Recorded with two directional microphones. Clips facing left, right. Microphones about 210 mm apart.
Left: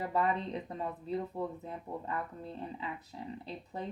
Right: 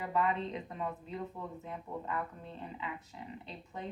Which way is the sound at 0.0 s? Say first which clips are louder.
Left 1 dB; 35° left (ahead or behind).